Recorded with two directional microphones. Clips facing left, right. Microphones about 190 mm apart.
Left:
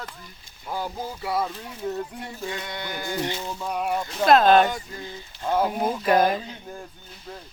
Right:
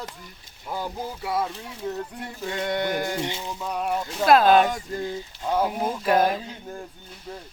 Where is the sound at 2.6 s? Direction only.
50° right (ahead or behind).